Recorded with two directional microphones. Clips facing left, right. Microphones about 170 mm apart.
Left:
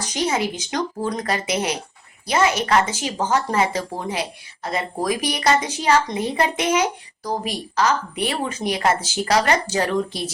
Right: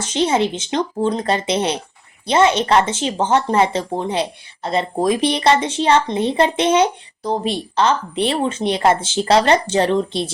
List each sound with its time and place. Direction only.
0.0 s speech: 25° right (ahead or behind)